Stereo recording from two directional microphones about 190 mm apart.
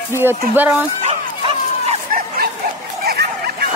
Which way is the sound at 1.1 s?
35° right (ahead or behind).